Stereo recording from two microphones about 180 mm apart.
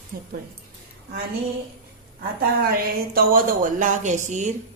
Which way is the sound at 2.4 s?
55° right (ahead or behind).